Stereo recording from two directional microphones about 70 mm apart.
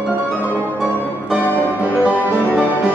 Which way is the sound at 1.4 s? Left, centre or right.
Left.